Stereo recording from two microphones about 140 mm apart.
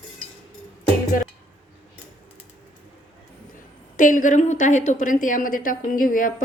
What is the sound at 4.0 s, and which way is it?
A woman's voice, 70° left (ahead or behind).